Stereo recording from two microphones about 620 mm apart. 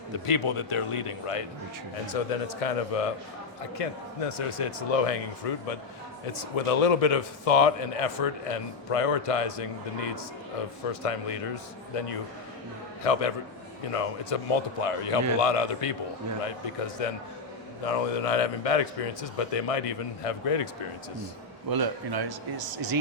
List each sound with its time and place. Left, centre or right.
0.3 s speech: left
2.1 s a man's voice: left
6.3 s a man's voice: left
21.7 s speech: right